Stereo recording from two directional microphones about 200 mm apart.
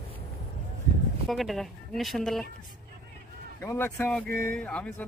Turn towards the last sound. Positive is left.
turn(degrees=5)  # may be behind; listen again after turning